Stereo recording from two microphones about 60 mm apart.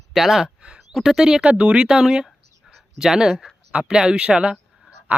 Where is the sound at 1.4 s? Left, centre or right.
Centre.